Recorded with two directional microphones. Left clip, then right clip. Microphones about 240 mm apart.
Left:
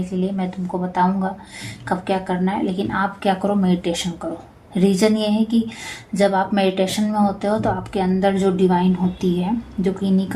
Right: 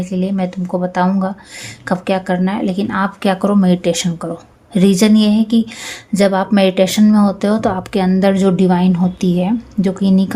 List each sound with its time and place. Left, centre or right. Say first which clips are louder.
0.2 s speech: right 5 dB; right